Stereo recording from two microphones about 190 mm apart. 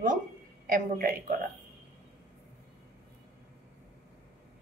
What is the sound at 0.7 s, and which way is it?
Speech, 50° right (ahead or behind).